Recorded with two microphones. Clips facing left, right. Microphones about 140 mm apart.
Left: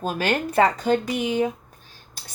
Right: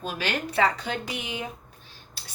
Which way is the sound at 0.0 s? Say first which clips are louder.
Left 6 dB; 45° left (ahead or behind).